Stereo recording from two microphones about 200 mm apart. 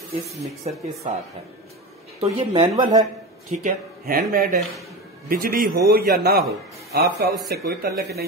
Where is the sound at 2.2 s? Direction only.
25° right (ahead or behind).